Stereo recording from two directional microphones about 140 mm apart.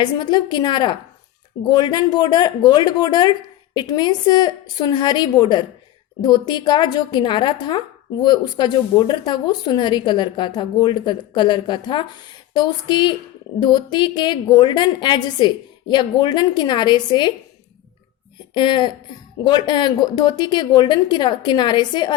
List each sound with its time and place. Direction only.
0.0 s a woman's voice: 30° left (ahead or behind)
18.5 s a woman's voice: 35° left (ahead or behind)